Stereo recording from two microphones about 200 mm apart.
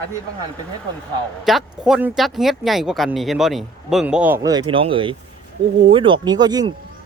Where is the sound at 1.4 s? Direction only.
Centre (ahead or behind).